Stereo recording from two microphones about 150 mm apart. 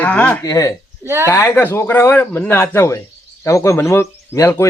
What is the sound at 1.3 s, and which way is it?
Speech, 20° left (ahead or behind).